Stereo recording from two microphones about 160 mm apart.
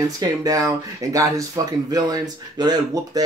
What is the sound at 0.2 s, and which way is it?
Speech, 20° right (ahead or behind).